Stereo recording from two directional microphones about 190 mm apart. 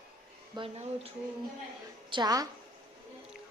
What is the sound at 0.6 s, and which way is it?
Speech, 25° right (ahead or behind).